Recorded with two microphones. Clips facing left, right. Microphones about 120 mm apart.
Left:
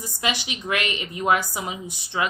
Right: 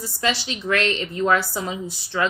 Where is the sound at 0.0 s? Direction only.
15° left (ahead or behind).